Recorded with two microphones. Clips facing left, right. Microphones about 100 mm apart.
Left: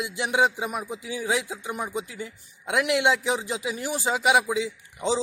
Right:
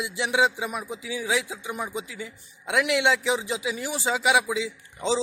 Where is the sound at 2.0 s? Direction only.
45° left (ahead or behind).